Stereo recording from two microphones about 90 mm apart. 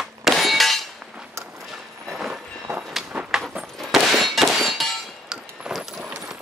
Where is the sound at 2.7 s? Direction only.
35° right (ahead or behind).